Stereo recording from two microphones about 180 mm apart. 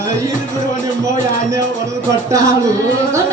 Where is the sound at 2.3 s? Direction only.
15° right (ahead or behind).